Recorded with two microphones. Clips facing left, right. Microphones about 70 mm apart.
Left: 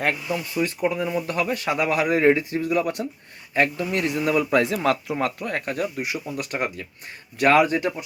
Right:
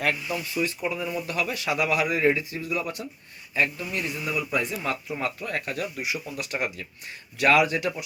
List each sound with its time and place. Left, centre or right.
0.0 s speech: left
5.5 s speech: left